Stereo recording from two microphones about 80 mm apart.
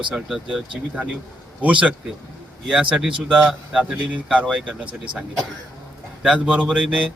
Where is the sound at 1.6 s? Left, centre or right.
Centre.